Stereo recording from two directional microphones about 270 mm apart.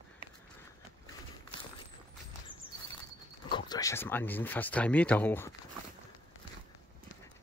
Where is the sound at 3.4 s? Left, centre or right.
Centre.